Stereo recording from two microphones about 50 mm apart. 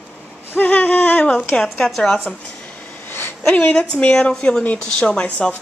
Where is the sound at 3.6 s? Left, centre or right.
Centre.